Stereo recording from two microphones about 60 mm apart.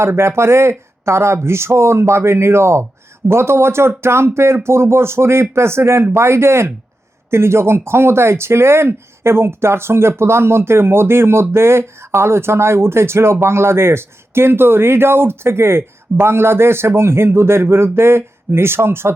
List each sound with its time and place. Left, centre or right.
0.0 s speech: right